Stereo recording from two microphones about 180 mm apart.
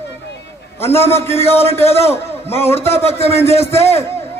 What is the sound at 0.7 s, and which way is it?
A man's voice, 15° left (ahead or behind).